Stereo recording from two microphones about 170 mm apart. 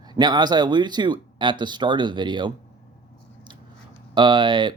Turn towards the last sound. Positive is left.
turn(degrees=-30)  # may be behind; listen again after turning